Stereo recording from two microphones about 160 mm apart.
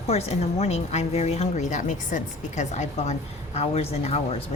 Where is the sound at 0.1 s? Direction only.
40° left (ahead or behind).